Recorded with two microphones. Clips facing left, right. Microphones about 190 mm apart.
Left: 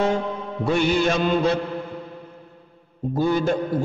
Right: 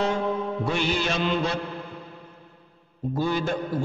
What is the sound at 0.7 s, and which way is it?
Mantra, 50° left (ahead or behind).